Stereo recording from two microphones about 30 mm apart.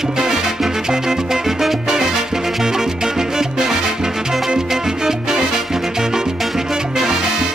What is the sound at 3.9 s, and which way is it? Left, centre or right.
Music, right.